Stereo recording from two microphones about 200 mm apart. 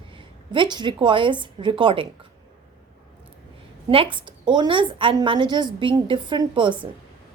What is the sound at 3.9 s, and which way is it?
A woman's voice, 25° right (ahead or behind).